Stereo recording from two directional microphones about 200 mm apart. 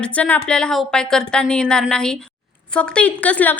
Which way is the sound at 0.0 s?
5° left (ahead or behind).